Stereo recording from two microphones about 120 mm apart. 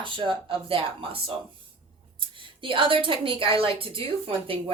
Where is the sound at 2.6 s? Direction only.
45° right (ahead or behind).